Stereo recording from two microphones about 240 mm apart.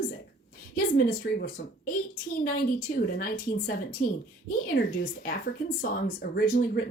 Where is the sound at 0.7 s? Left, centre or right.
Left.